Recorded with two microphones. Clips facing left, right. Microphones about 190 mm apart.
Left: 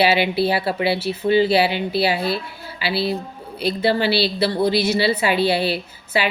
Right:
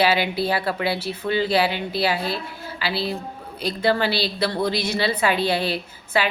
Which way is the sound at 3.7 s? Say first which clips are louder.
Left 2 dB; 50° right (ahead or behind).